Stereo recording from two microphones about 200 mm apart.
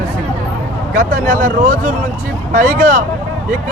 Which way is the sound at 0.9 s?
40° right (ahead or behind).